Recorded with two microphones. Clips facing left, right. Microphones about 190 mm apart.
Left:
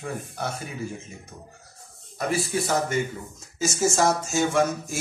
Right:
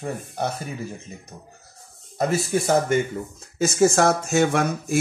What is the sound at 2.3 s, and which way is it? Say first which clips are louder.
Speech: right 3 dB; 50° right (ahead or behind).